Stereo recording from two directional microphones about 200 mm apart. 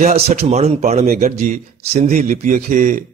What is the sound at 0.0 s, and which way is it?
A man's voice, 35° right (ahead or behind).